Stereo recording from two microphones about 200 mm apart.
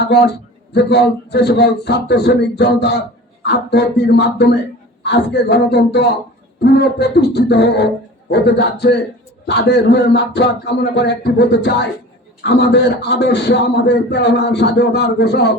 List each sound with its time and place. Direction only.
0.0 s a man's voice: 55° left (ahead or behind)